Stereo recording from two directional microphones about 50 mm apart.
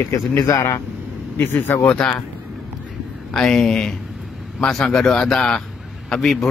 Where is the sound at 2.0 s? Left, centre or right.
Centre.